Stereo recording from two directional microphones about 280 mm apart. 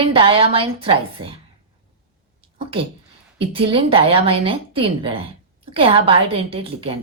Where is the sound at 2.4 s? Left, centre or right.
Centre.